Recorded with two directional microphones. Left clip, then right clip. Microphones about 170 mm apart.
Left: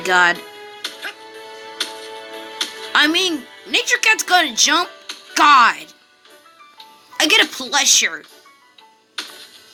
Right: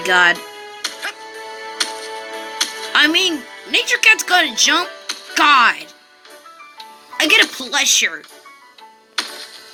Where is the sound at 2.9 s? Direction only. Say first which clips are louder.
Right 1 dB; 5° left (ahead or behind).